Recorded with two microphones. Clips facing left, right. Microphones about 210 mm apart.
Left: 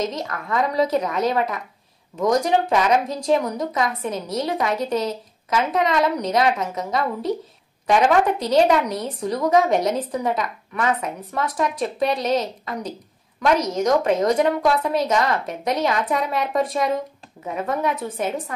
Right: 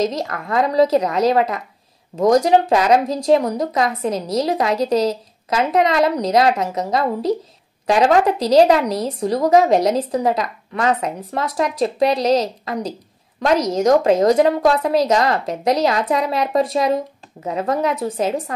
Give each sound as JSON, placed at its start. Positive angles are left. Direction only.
{"t": 0.0, "sound": "speech", "side_deg": -40}
{"t": 13.6, "sound": "speech", "side_deg": -40}